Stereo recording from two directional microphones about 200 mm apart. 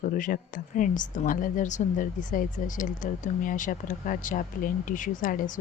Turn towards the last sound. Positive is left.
turn(degrees=40)  # may be behind; listen again after turning